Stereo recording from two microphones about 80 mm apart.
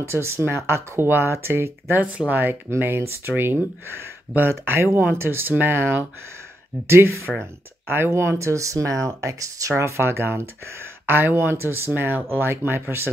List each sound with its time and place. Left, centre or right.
0.0 s speech: right